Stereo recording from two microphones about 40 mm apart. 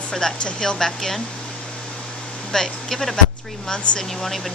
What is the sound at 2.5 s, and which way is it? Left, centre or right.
Speech, centre.